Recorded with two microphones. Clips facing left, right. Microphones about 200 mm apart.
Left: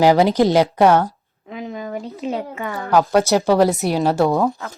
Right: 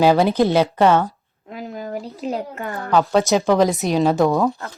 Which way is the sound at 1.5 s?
Centre (ahead or behind).